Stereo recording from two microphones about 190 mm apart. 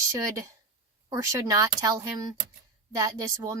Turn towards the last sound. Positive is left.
turn(degrees=-15)  # may be behind; listen again after turning